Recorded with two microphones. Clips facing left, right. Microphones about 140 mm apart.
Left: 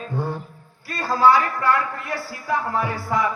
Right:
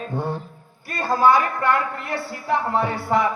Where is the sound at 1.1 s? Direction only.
20° right (ahead or behind).